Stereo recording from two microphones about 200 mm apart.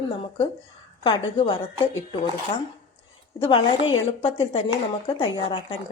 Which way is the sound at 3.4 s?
25° left (ahead or behind).